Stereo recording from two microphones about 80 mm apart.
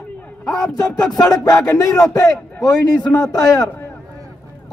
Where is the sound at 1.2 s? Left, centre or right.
Left.